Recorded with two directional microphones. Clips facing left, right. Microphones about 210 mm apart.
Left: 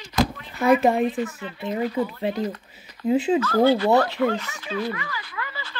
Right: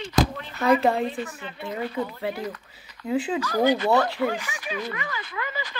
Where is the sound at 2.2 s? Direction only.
20° left (ahead or behind).